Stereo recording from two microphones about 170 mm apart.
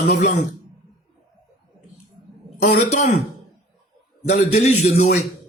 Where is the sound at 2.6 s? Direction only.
45° left (ahead or behind).